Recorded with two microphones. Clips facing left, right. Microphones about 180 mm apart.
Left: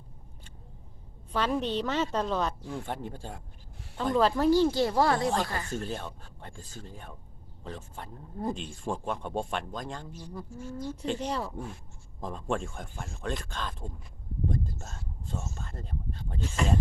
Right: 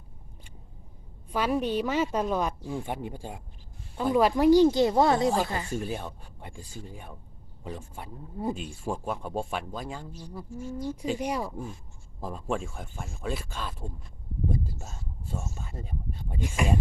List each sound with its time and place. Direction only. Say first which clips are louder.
1.3 s speech: right 2 dB; 10° right (ahead or behind)